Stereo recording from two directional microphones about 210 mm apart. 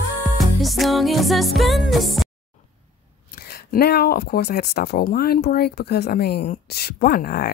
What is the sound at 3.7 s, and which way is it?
Speech, 45° left (ahead or behind).